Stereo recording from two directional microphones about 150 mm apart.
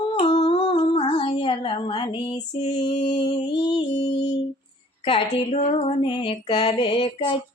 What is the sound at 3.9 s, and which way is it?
Music, 45° left (ahead or behind).